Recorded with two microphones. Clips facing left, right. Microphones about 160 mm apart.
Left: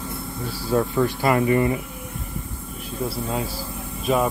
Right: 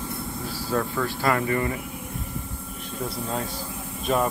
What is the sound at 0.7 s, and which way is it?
Speech, 20° left (ahead or behind).